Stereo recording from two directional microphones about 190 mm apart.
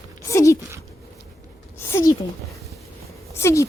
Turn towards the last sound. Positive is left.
turn(degrees=15)  # may be behind; listen again after turning